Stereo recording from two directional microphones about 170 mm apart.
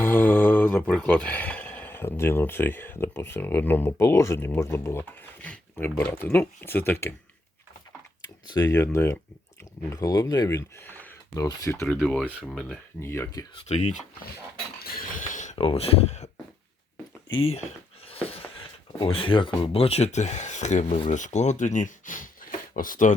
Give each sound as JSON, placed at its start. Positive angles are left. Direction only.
{"t": 0.0, "sound": "speech", "side_deg": 10}
{"t": 8.4, "sound": "speech", "side_deg": 20}
{"t": 11.9, "sound": "speech", "side_deg": 5}
{"t": 13.0, "sound": "speech", "side_deg": 15}
{"t": 13.7, "sound": "speech", "side_deg": 40}
{"t": 14.8, "sound": "a sound", "side_deg": 60}
{"t": 15.5, "sound": "speech", "side_deg": 35}
{"t": 18.1, "sound": "speech", "side_deg": 35}